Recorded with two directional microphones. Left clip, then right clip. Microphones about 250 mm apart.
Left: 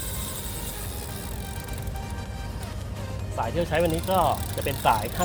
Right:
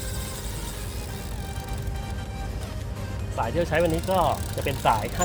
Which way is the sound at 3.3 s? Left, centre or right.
Centre.